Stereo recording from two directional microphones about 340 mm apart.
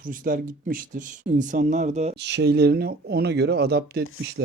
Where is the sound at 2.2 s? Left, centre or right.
Right.